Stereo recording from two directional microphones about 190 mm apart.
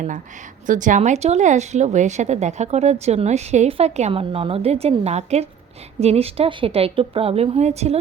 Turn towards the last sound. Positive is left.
turn(degrees=-35)  # may be behind; listen again after turning